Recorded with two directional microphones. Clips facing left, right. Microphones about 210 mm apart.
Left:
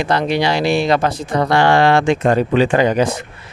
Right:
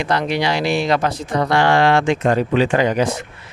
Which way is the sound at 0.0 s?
30° left (ahead or behind).